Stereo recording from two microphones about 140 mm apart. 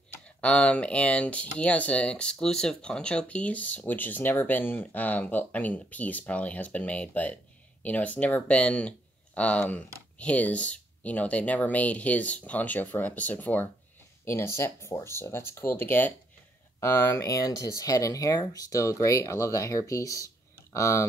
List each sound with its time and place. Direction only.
0.1 s speech: 10° left (ahead or behind)